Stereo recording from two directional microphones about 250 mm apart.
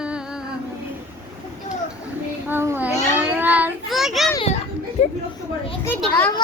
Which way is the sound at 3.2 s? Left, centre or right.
Centre.